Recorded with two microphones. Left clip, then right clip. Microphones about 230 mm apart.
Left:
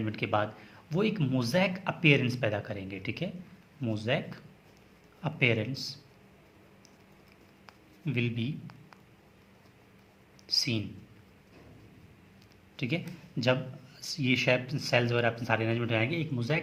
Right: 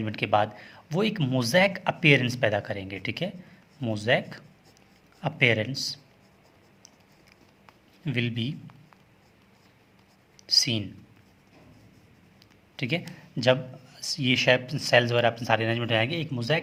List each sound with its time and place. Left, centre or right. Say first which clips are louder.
0.0 s speech: right 6 dB; right
8.0 s speech: right 3 dB; right
10.4 s speech: right 6 dB; right
12.7 s a man's voice: right 4 dB; right